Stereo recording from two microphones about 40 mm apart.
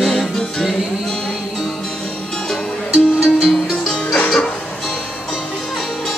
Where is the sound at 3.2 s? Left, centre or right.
Centre.